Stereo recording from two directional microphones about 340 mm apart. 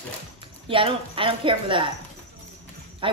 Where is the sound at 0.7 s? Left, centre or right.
Centre.